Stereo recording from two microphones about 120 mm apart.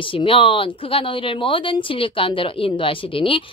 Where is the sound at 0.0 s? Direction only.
45° left (ahead or behind).